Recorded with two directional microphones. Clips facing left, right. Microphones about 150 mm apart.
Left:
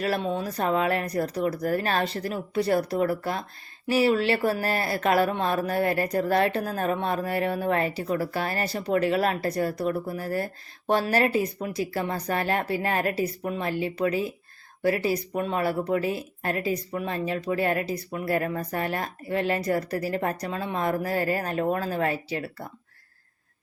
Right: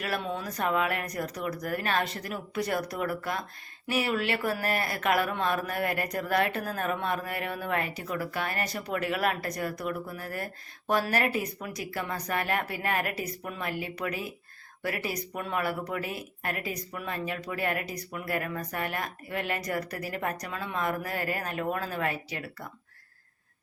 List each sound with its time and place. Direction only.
0.0 s speech: 30° left (ahead or behind)